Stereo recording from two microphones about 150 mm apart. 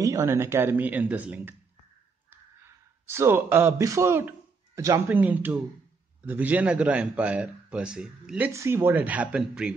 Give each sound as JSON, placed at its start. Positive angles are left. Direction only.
{"t": 0.0, "sound": "a man's voice", "side_deg": -20}
{"t": 3.1, "sound": "a man's voice", "side_deg": -15}
{"t": 8.5, "sound": "a man's voice", "side_deg": -15}